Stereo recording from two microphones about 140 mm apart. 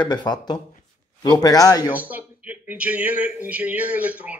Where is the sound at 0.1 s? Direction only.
30° left (ahead or behind).